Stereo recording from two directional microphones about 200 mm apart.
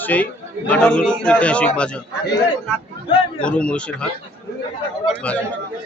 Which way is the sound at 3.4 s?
5° left (ahead or behind).